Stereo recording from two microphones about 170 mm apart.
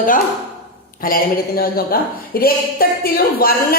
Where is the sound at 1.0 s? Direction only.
60° left (ahead or behind).